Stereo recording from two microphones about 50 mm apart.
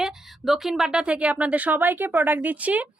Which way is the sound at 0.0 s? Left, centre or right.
Centre.